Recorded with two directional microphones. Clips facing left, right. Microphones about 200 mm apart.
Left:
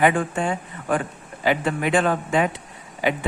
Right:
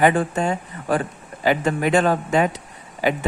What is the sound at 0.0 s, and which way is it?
A man's voice, 35° right (ahead or behind).